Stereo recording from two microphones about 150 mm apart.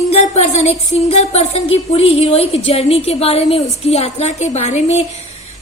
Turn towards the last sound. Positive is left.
turn(degrees=50)  # may be behind; listen again after turning